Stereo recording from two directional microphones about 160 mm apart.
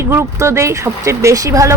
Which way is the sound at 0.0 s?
15° right (ahead or behind).